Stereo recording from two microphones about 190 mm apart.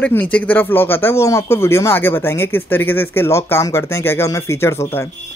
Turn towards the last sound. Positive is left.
turn(degrees=15)  # may be behind; listen again after turning